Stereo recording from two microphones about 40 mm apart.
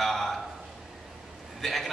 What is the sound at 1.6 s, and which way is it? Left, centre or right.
Speech, centre.